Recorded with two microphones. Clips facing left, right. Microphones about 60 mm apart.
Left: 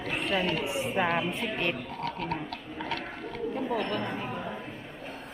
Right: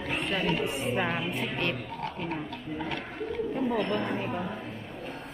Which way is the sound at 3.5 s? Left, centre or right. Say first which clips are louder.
Right 2 dB; centre.